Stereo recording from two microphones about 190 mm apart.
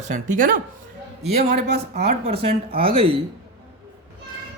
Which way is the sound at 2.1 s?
35° right (ahead or behind).